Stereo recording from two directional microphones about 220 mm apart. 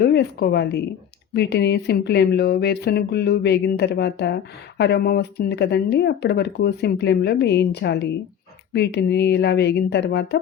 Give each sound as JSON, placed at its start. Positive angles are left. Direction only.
{"t": 0.0, "sound": "speech", "side_deg": 45}